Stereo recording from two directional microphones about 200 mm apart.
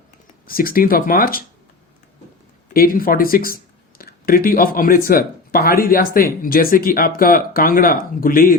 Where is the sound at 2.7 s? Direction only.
45° left (ahead or behind).